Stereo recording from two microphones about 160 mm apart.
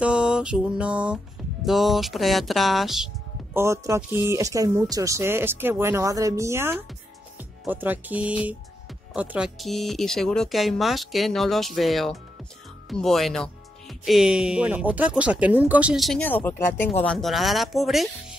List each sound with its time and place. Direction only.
0.0 s speech: 5° right (ahead or behind)
3.5 s speech: 15° right (ahead or behind); by 16.3 s centre (ahead or behind)
16.3 s speech: 10° left (ahead or behind)